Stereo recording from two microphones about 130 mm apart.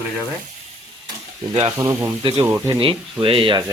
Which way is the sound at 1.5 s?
45° right (ahead or behind).